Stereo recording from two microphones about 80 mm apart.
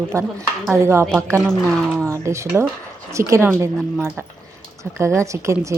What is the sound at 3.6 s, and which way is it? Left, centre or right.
Speech, right.